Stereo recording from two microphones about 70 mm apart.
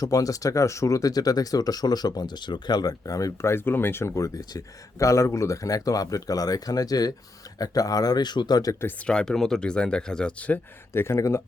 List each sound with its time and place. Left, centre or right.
0.0 s speech: left
3.4 s speech: left
4.1 s speech: left
9.0 s speech: centre
10.9 s speech: left